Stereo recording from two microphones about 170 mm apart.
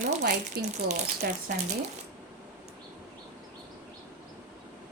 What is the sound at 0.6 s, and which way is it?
Speech, 65° right (ahead or behind).